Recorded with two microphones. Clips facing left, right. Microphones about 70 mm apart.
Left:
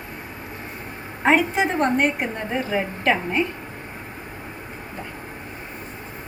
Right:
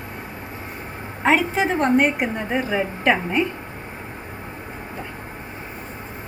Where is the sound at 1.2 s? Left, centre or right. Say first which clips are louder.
Even; centre.